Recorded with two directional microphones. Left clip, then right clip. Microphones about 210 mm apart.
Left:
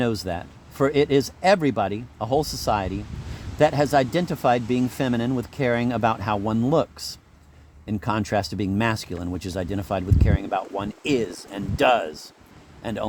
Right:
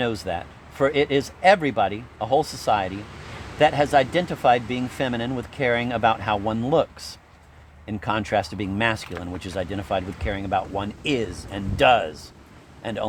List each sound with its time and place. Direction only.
0.0 s a man's voice: 55° left (ahead or behind)